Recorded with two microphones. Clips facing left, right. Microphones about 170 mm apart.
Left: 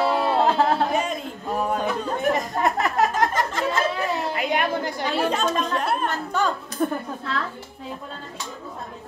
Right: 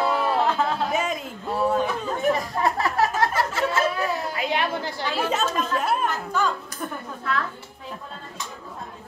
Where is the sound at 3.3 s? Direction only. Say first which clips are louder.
Even; 5° right (ahead or behind).